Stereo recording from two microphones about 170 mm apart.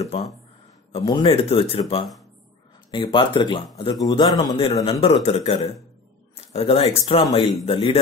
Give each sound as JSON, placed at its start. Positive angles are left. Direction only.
{"t": 0.0, "sound": "speech", "side_deg": 40}
{"t": 0.9, "sound": "speech", "side_deg": 30}
{"t": 5.0, "sound": "speech", "side_deg": 40}